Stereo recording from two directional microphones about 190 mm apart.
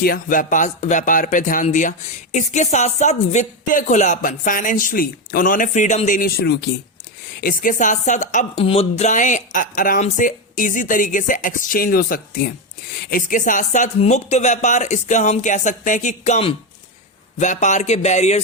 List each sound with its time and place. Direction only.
0.0 s speech: 45° left (ahead or behind)
7.4 s speech: 45° left (ahead or behind)